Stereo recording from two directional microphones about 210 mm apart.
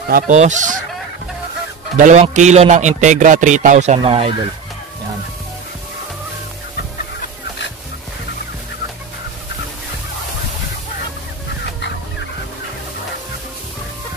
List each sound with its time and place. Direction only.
0.1 s a man's voice: 35° right (ahead or behind)
2.0 s a man's voice: 35° right (ahead or behind)